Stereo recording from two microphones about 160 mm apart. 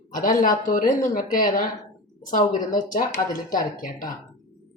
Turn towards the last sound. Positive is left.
turn(degrees=60)  # may be behind; listen again after turning